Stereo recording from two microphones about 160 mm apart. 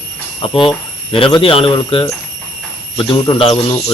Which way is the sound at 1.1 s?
30° left (ahead or behind).